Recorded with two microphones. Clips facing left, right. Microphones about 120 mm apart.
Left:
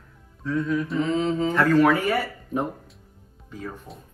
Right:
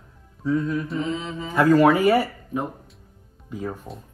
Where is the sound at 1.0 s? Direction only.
35° left (ahead or behind).